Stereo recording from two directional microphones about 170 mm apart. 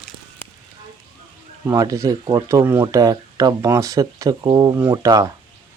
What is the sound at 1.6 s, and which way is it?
Speech, 20° right (ahead or behind).